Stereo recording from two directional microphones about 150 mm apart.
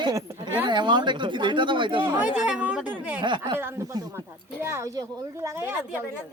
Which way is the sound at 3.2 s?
30° right (ahead or behind).